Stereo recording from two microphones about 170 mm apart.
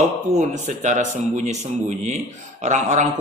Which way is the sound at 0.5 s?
45° right (ahead or behind).